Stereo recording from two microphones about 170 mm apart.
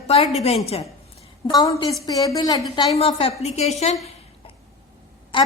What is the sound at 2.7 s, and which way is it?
A woman's voice, 35° left (ahead or behind).